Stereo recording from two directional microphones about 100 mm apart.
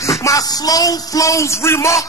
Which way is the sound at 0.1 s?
35° left (ahead or behind).